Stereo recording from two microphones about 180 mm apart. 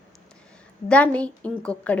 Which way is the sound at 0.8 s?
5° left (ahead or behind).